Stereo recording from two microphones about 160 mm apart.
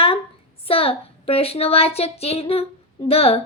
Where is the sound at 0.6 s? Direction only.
35° left (ahead or behind).